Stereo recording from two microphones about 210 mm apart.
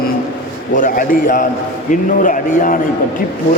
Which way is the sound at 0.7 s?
40° left (ahead or behind).